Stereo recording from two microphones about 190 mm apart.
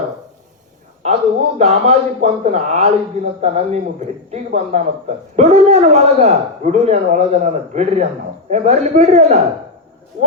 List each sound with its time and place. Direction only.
1.0 s speech: 35° right (ahead or behind)